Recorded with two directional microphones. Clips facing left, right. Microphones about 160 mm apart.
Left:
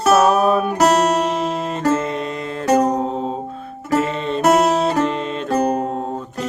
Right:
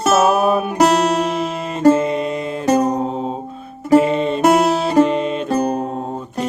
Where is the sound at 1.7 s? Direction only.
15° right (ahead or behind).